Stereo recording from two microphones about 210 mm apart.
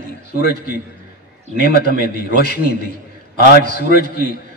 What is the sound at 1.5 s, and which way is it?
A man's voice, 45° left (ahead or behind).